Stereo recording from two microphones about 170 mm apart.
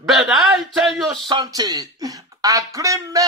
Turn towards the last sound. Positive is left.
turn(degrees=-20)  # may be behind; listen again after turning